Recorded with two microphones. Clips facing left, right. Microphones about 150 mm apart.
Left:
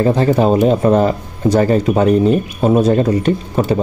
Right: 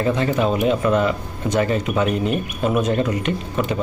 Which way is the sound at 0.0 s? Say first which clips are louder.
Left 6 dB; 35° left (ahead or behind).